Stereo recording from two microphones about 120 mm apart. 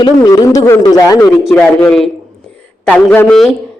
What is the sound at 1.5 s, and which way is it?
Speech, 10° left (ahead or behind).